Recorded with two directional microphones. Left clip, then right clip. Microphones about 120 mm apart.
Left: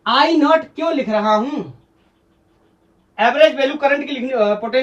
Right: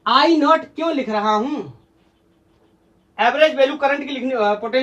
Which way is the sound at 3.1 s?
15° right (ahead or behind).